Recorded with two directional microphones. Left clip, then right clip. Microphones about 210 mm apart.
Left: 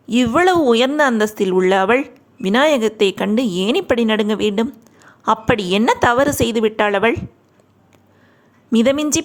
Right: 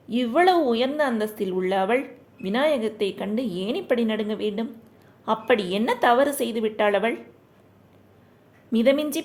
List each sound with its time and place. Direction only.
0.1 s speech: 30° left (ahead or behind)
8.7 s speech: 25° left (ahead or behind)